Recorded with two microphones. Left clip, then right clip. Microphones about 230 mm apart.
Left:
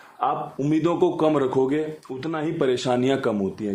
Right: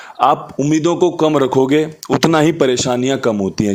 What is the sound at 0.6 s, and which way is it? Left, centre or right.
Speech, right.